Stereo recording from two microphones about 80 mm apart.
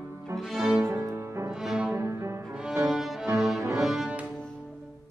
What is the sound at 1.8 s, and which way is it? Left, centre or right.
Music, right.